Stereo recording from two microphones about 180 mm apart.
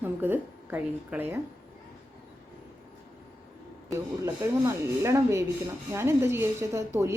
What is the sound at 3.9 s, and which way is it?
A woman's voice, 15° right (ahead or behind).